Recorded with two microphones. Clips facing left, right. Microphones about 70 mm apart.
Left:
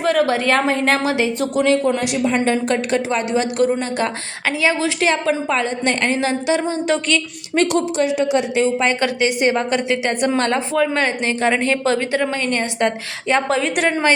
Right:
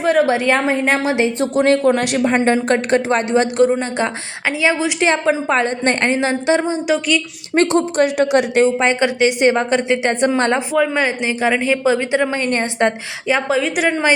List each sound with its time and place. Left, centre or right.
0.0 s a woman's voice: centre
1.0 s a woman's voice: right
1.6 s speech: right
2.3 s speech: right
3.7 s a woman's voice: right
6.8 s a woman's voice: centre
7.5 s speech: right
7.9 s a woman's voice: right
8.6 s a woman's voice: right
10.8 s a woman's voice: centre; by 12.9 s right
13.2 s a woman's voice: centre